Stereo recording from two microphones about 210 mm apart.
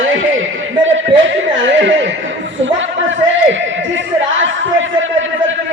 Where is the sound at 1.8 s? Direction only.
60° right (ahead or behind).